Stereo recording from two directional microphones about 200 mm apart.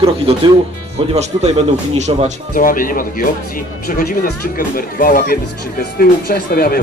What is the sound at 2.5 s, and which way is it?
Speech, 45° left (ahead or behind).